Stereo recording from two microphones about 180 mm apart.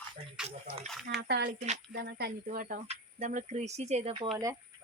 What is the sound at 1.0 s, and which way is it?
Speech, 70° right (ahead or behind).